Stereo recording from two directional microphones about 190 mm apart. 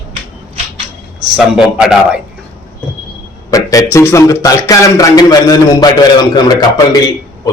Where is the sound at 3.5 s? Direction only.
20° left (ahead or behind).